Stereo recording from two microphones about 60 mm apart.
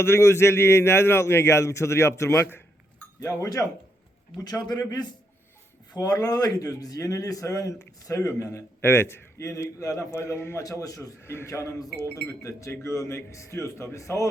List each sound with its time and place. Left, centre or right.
0.0 s a man's voice: left
4.4 s a man's voice: left
6.0 s a man's voice: left
8.2 s a man's voice: left
9.4 s a man's voice: left
10.3 s a man's voice: left
10.6 s a man's voice: left
11.3 s a man's voice: left